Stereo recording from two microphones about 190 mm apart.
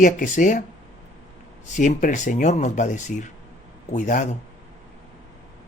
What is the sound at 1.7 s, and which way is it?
Speech, 40° left (ahead or behind).